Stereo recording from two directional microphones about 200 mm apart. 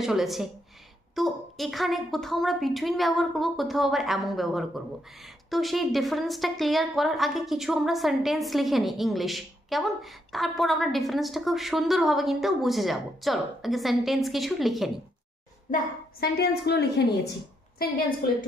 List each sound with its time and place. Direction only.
0.0 s a woman's voice: centre (ahead or behind)
15.7 s a woman's voice: 50° left (ahead or behind)